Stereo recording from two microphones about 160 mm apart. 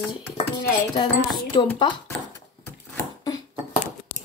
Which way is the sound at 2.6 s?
20° left (ahead or behind).